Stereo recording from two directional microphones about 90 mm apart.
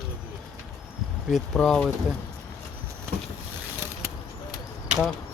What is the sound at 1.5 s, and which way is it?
Speech, 10° left (ahead or behind).